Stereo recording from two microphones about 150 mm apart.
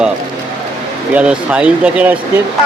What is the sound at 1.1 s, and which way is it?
Speech, 10° right (ahead or behind).